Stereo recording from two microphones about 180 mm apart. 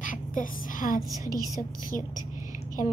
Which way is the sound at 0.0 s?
45° left (ahead or behind).